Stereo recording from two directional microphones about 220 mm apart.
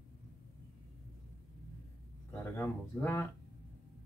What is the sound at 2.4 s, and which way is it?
Speech, 10° left (ahead or behind).